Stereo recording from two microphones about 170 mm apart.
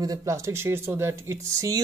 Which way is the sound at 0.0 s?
20° right (ahead or behind).